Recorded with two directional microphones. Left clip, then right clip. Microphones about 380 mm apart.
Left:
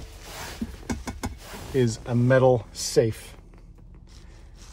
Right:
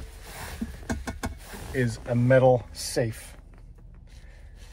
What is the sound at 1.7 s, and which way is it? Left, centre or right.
Speech, left.